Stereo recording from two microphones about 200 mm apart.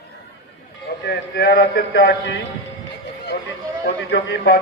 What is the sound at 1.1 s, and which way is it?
A man's voice, 55° left (ahead or behind).